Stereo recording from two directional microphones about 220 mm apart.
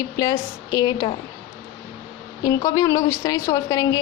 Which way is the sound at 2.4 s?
15° left (ahead or behind).